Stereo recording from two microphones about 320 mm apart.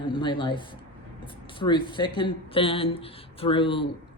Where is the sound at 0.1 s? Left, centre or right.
Centre.